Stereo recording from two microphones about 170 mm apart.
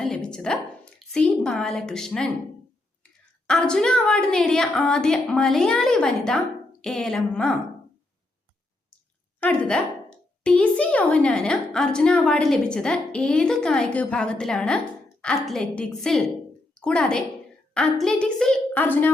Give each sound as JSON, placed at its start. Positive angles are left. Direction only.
{"t": 0.0, "sound": "a sound", "side_deg": 5}
{"t": 3.0, "sound": "a child's voice", "side_deg": 5}
{"t": 9.4, "sound": "a child's voice", "side_deg": 5}